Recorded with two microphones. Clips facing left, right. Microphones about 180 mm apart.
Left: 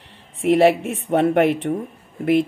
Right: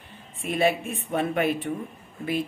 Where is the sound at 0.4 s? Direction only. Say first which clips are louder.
Left 9 dB; 75° left (ahead or behind).